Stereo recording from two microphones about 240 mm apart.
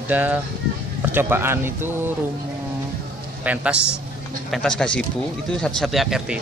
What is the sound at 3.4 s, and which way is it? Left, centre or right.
Speech, centre.